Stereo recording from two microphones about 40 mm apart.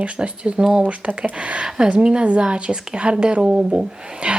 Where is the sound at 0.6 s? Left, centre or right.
Centre.